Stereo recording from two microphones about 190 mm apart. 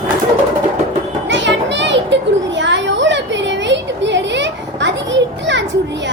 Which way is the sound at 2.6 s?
70° right (ahead or behind).